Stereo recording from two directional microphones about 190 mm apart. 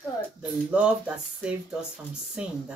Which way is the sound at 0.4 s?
5° right (ahead or behind).